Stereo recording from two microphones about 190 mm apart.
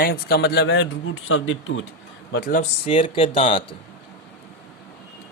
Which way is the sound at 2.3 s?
50° left (ahead or behind).